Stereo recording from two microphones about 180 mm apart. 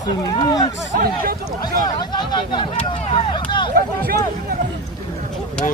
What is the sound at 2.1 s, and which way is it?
Speech, 25° left (ahead or behind).